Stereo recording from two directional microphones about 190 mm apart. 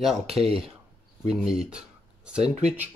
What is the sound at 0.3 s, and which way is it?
Speech, 30° right (ahead or behind).